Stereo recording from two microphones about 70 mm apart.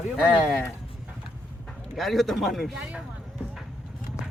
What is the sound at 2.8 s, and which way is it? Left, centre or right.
Speech, centre.